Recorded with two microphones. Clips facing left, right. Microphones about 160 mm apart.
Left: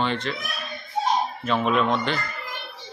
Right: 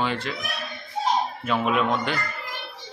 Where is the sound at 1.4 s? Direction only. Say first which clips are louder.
Left 2 dB; 10° right (ahead or behind).